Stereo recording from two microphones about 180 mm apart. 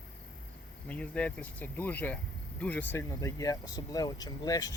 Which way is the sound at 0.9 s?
5° left (ahead or behind).